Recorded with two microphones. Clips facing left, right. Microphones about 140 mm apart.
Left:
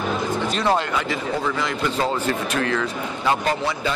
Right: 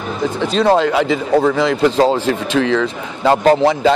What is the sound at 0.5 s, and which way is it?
A man's voice, 90° right.